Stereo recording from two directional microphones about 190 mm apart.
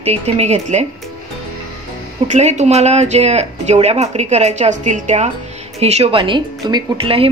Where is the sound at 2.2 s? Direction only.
35° right (ahead or behind).